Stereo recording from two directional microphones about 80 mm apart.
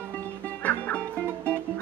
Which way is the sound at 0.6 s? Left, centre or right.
Centre.